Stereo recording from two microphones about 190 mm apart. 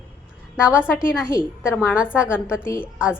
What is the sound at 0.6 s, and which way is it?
A woman's voice, 5° right (ahead or behind).